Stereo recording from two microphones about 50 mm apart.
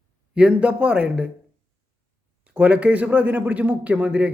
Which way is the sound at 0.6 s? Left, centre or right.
Right.